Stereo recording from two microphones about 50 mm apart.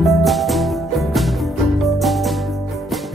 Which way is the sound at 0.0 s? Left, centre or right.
Centre.